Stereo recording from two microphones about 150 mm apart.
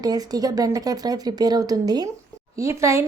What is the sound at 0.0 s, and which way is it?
A woman's voice, 25° right (ahead or behind).